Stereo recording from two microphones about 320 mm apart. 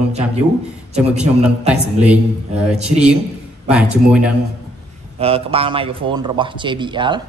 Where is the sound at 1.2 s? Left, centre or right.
Centre.